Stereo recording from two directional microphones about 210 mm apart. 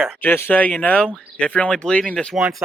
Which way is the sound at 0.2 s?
10° left (ahead or behind).